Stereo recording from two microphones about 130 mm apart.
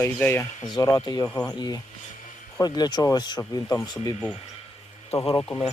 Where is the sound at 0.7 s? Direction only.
30° left (ahead or behind).